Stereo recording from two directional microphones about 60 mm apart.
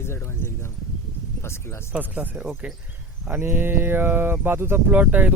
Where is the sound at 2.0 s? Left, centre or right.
Right.